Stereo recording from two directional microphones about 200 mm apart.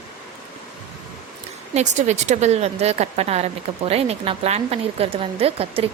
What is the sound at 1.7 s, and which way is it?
Speech, 35° right (ahead or behind).